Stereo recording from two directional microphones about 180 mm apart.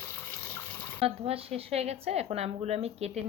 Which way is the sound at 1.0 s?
30° right (ahead or behind).